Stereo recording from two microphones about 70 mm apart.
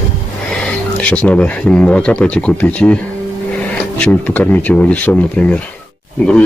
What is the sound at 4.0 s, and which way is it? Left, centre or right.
Speech, left.